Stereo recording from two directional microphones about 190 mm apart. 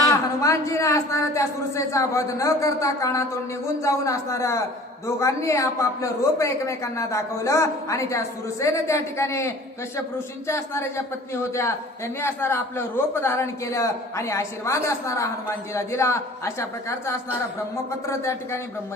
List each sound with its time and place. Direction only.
0.1 s a man's voice: 15° left (ahead or behind)
12.2 s a man's voice: 15° left (ahead or behind)
18.1 s a man's voice: 15° left (ahead or behind)